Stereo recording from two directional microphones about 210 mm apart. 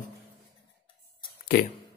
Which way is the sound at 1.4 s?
50° left (ahead or behind).